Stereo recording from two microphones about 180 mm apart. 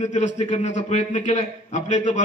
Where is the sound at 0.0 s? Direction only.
40° left (ahead or behind).